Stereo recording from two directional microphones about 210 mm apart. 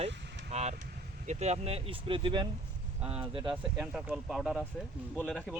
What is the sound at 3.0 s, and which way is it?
Speech, 5° right (ahead or behind).